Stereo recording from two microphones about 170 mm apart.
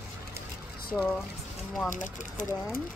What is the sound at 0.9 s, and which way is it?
Speech, centre (ahead or behind).